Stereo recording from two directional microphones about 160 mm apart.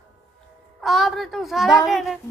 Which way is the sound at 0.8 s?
Centre (ahead or behind).